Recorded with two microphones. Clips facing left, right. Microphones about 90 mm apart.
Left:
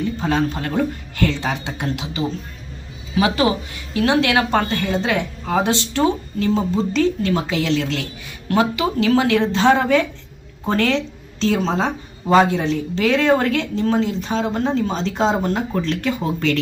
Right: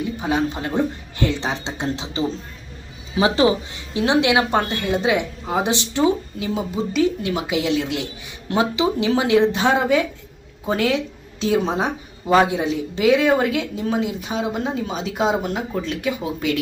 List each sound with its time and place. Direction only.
0.0 s a woman's voice: 15° right (ahead or behind)